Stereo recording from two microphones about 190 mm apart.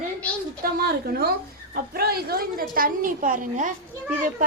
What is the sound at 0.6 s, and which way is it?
A woman's voice, 50° right (ahead or behind).